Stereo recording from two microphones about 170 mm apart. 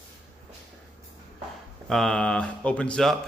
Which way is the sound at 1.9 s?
Centre (ahead or behind).